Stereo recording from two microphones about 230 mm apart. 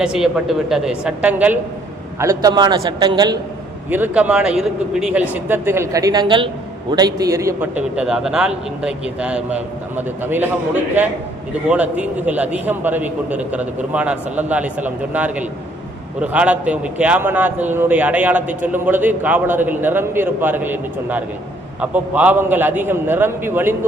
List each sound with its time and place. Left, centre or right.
0.0 s a man's voice: centre
11.7 s a man's voice: centre